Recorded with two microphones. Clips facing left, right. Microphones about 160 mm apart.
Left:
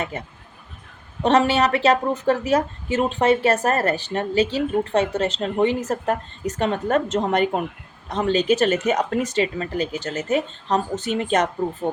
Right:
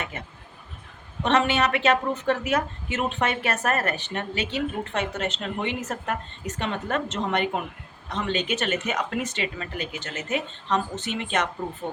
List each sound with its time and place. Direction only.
1.2 s a woman's voice: 35° left (ahead or behind)